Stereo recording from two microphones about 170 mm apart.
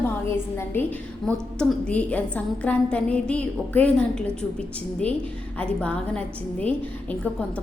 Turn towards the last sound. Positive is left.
turn(degrees=10)  # may be behind; listen again after turning